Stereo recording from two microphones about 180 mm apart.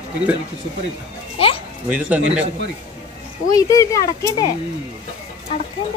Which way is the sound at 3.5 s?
20° left (ahead or behind).